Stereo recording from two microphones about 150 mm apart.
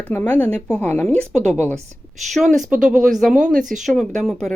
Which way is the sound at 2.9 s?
60° right (ahead or behind).